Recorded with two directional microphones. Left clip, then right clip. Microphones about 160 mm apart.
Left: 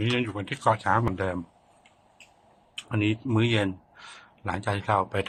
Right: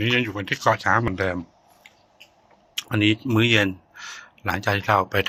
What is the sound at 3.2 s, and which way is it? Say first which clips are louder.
Speech: right 6 dB; 15° right (ahead or behind).